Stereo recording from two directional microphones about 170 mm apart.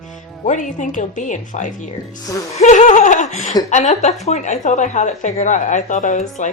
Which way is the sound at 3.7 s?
45° left (ahead or behind).